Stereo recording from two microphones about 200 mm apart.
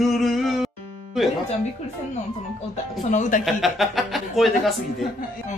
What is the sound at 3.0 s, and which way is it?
Speech, 40° left (ahead or behind).